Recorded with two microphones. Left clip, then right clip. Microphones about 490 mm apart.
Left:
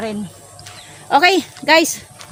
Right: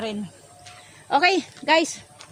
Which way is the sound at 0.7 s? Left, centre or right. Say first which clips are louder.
Left 7 dB; right.